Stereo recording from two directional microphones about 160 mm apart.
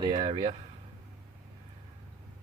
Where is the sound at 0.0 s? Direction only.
30° right (ahead or behind).